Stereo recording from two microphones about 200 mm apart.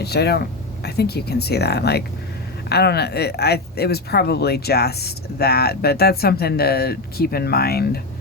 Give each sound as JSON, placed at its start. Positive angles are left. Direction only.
{"t": 0.0, "sound": "speech", "side_deg": 55}